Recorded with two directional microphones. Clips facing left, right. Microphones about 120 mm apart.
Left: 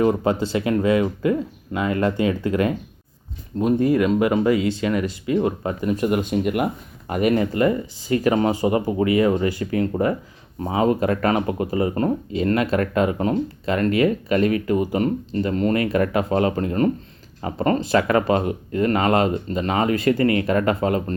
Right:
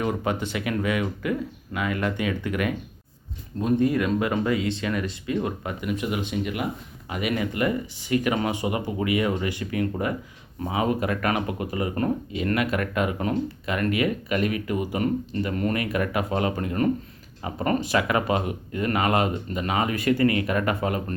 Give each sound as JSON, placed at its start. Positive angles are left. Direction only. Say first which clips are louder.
{"t": 0.0, "sound": "speech", "louder": "left 7 dB", "side_deg": 30}
{"t": 3.8, "sound": "speech", "louder": "left 5 dB", "side_deg": 25}
{"t": 7.1, "sound": "speech", "louder": "left 7 dB", "side_deg": 45}